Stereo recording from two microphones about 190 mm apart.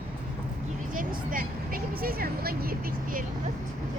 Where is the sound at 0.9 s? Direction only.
45° right (ahead or behind).